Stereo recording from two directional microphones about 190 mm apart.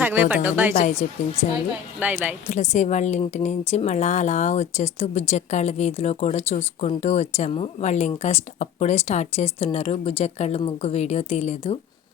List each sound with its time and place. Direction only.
0.0 s a woman's voice: 10° right (ahead or behind)
0.9 s speech: 35° left (ahead or behind)
2.0 s a woman's voice: 10° right (ahead or behind)
2.5 s speech: 40° left (ahead or behind)